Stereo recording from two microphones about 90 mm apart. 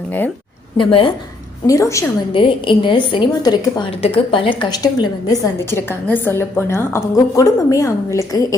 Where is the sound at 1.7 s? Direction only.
35° left (ahead or behind).